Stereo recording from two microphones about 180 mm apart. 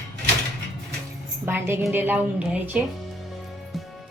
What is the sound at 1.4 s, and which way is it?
A woman's voice, 10° right (ahead or behind).